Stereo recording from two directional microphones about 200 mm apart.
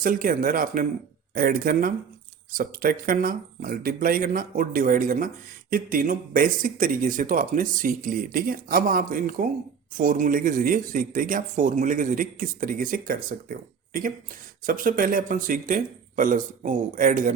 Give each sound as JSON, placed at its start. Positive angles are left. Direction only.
{"t": 0.0, "sound": "speech", "side_deg": -45}